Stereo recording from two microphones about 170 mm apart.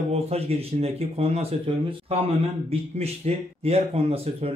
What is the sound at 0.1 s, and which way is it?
Speech, 35° right (ahead or behind).